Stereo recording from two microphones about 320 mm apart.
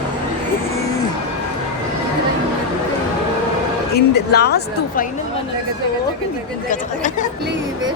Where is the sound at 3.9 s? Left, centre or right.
Left.